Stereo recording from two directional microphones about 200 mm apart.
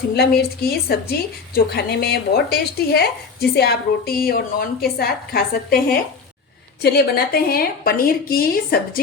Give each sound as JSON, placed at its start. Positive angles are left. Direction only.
{"t": 0.2, "sound": "a woman's voice", "side_deg": 50}